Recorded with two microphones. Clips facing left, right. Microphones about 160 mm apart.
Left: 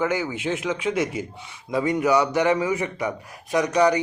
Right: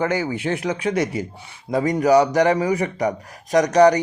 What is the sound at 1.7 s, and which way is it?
A man's voice, 40° right (ahead or behind).